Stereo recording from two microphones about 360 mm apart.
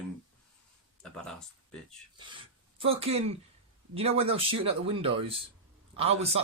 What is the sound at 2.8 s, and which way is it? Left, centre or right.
Speech, centre.